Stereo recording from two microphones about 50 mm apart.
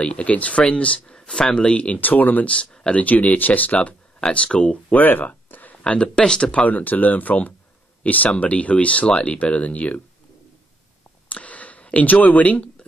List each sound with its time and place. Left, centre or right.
0.0 s speech: left
3.0 s speech: left
4.9 s a sound: left
6.1 s speech: centre
6.6 s speech: left
11.2 s a sound: left